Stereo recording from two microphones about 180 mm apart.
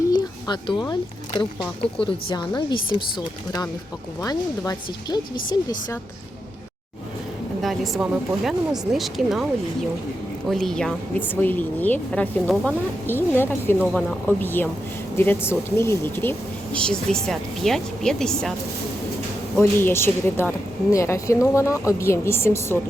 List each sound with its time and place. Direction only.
0.1 s a sound: 25° left (ahead or behind)
1.4 s speech: 30° left (ahead or behind)
4.2 s speech: 20° left (ahead or behind)
7.6 s speech: centre (ahead or behind)
10.5 s speech: centre (ahead or behind)
13.8 s speech: centre (ahead or behind)
19.5 s speech: 15° left (ahead or behind)